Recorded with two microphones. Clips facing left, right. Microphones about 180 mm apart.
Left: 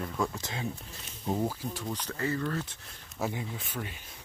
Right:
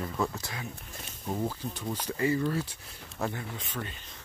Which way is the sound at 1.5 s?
Centre (ahead or behind).